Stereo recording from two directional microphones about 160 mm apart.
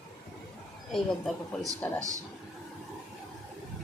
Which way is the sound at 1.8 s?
5° left (ahead or behind).